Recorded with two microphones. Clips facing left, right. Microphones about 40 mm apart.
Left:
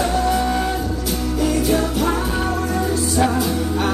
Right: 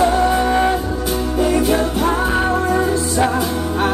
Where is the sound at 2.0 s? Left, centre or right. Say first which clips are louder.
Right 3 dB; right.